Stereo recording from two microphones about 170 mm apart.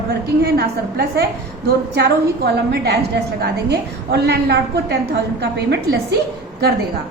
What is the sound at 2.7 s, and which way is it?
A woman's voice, 75° right (ahead or behind).